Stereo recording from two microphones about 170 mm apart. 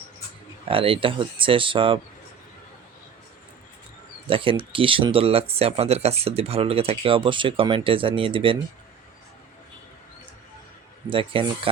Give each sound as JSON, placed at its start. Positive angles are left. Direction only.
{"t": 0.7, "sound": "speech", "side_deg": -30}
{"t": 4.3, "sound": "speech", "side_deg": -30}
{"t": 11.1, "sound": "speech", "side_deg": -30}